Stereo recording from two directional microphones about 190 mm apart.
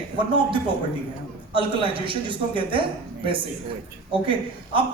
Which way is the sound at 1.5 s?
25° right (ahead or behind).